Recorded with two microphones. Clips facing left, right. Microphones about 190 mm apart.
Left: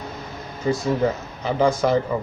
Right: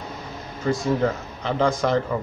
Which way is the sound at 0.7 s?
5° left (ahead or behind).